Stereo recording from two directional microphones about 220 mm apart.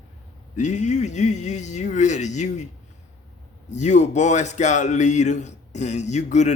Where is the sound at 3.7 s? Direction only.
30° left (ahead or behind).